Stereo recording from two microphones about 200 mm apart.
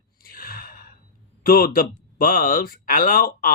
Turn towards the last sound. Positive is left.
turn(degrees=45)  # may be behind; listen again after turning